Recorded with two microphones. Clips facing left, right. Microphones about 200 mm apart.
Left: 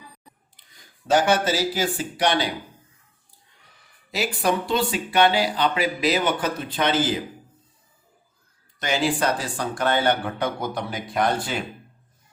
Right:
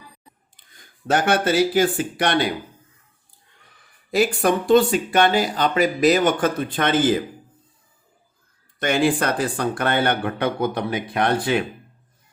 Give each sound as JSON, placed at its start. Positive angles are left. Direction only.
{"t": 0.5, "sound": "speech", "side_deg": -55}
{"t": 4.1, "sound": "speech", "side_deg": -50}
{"t": 8.8, "sound": "speech", "side_deg": -55}